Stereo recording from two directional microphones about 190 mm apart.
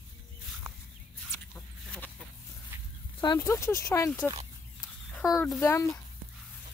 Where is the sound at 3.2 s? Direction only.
20° left (ahead or behind).